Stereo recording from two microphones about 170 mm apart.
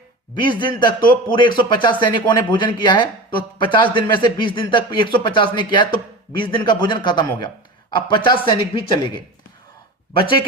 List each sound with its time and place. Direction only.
0.3 s a man's voice: 25° left (ahead or behind)